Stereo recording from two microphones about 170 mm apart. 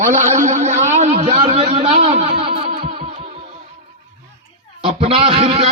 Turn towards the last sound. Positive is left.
turn(degrees=-30)  # may be behind; listen again after turning